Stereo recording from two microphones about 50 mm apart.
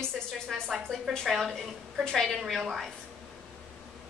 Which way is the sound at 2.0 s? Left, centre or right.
Centre.